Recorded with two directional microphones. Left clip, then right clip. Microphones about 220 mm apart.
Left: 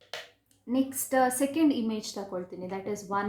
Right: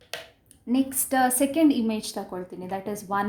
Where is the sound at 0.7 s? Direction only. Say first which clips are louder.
Right 3 dB; 45° right (ahead or behind).